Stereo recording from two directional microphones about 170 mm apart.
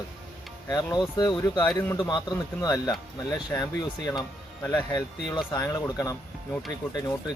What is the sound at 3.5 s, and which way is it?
Speech, 10° left (ahead or behind).